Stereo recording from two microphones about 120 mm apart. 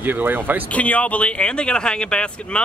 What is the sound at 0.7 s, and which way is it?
Speech, 10° left (ahead or behind).